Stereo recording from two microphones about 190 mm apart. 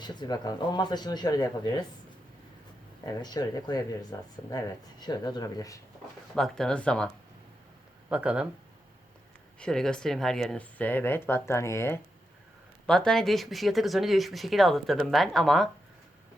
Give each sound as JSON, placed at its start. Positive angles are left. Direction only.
{"t": 0.0, "sound": "speech", "side_deg": 20}
{"t": 3.1, "sound": "speech", "side_deg": 20}
{"t": 6.3, "sound": "speech", "side_deg": 5}
{"t": 8.1, "sound": "speech", "side_deg": -5}
{"t": 9.6, "sound": "speech", "side_deg": 5}